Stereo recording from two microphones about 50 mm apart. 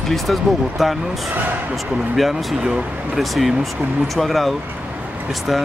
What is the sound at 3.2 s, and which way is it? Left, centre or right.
Speech, centre.